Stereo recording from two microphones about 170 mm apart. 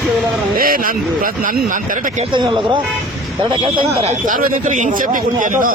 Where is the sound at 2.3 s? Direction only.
25° right (ahead or behind).